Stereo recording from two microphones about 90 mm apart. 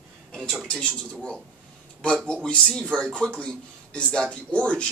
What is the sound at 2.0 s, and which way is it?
Speech, 10° left (ahead or behind).